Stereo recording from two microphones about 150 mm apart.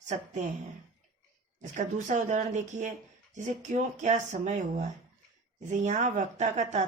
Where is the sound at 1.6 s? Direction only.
50° right (ahead or behind).